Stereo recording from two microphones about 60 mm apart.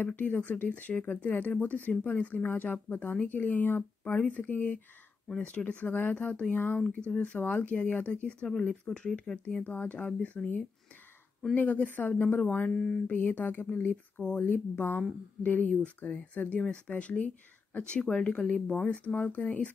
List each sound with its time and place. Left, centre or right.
0.0 s speech: left; by 9.4 s centre
9.7 s speech: left
12.4 s speech: left
12.7 s speech: centre
13.0 s speech: left